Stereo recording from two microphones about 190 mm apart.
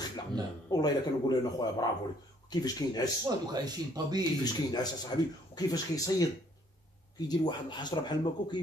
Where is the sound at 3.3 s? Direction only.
20° right (ahead or behind).